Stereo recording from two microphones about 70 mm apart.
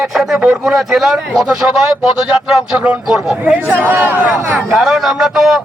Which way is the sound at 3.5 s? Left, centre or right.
Right.